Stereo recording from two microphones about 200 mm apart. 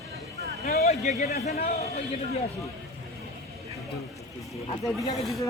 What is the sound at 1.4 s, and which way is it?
Speech, 30° left (ahead or behind).